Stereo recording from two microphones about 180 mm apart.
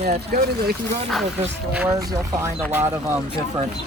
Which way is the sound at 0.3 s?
60° right (ahead or behind).